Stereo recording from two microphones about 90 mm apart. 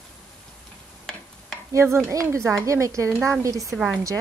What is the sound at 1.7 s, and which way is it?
A woman's voice, 30° right (ahead or behind).